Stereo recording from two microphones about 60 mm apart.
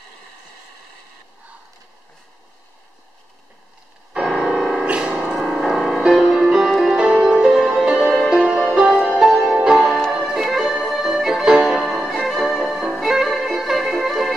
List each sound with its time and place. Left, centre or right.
4.1 s keyboard: centre
4.8 s music: right
5.1 s music: centre